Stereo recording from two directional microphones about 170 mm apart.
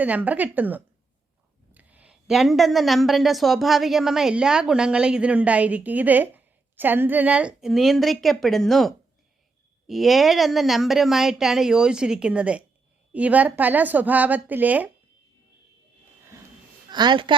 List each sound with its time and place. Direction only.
0.0 s a woman's voice: 10° right (ahead or behind)
16.9 s a woman's voice: 25° right (ahead or behind)